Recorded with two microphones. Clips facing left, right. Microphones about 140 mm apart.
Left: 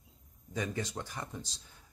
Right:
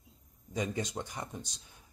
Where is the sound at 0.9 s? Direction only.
20° right (ahead or behind).